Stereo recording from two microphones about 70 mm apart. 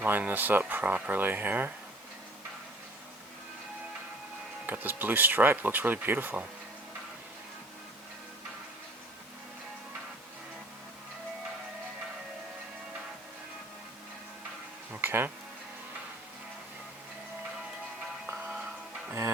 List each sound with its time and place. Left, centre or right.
0.0 s speech: right
4.6 s speech: right
15.0 s speech: right
18.4 s music: centre